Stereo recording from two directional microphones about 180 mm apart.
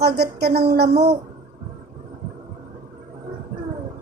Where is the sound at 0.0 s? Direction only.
65° right (ahead or behind).